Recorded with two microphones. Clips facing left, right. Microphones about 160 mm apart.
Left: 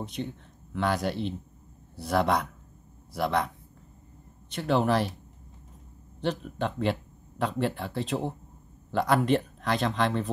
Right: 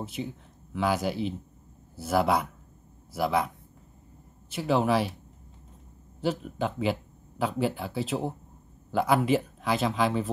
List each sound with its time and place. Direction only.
0.0 s speech: 5° right (ahead or behind)
6.2 s speech: 5° right (ahead or behind)